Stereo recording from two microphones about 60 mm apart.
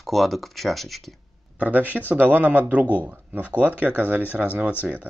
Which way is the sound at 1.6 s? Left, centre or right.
Right.